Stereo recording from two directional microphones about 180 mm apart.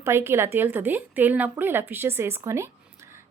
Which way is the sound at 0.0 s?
15° right (ahead or behind).